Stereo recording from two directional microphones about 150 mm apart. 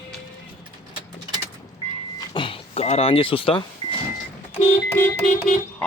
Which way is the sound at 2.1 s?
35° left (ahead or behind).